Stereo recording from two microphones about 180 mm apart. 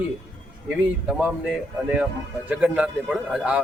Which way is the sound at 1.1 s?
5° right (ahead or behind).